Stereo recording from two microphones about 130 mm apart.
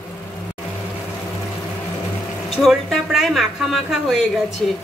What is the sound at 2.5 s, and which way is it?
A woman's voice, centre (ahead or behind).